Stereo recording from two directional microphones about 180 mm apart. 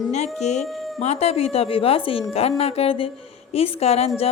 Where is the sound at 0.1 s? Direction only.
40° left (ahead or behind).